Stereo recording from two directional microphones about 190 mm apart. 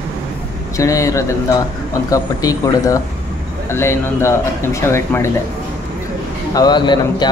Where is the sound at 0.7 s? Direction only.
15° left (ahead or behind).